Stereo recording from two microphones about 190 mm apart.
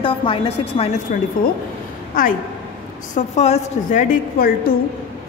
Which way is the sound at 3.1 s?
35° left (ahead or behind).